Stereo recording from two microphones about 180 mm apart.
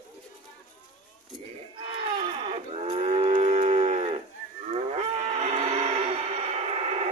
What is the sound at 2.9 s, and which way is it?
Moo, 35° right (ahead or behind).